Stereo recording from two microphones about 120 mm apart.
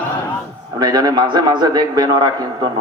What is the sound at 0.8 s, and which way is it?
A man's voice, 35° right (ahead or behind).